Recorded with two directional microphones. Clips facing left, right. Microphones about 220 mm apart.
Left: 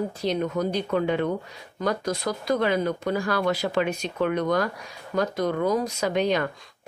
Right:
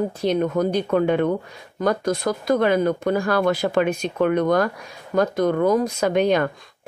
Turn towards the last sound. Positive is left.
turn(degrees=-50)  # may be behind; listen again after turning